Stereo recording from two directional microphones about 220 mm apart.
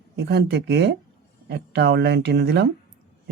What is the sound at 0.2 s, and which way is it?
Speech, 50° right (ahead or behind).